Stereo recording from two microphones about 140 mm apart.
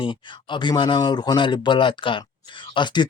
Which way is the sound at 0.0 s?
35° left (ahead or behind).